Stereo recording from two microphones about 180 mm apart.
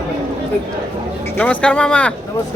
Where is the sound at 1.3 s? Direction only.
5° left (ahead or behind).